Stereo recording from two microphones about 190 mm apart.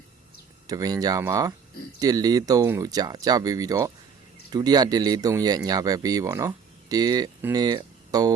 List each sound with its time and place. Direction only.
0.7 s speech: 20° right (ahead or behind)